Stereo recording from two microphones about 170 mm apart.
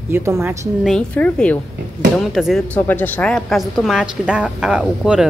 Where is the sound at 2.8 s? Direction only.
10° left (ahead or behind).